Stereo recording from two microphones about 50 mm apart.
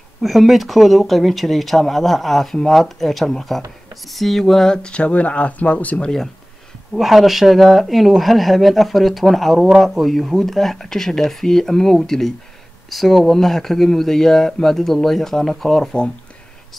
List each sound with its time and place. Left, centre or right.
0.2 s speech: centre
4.8 s speech: left
7.0 s speech: centre